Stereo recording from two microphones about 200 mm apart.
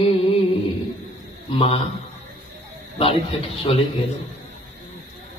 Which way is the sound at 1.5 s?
30° left (ahead or behind).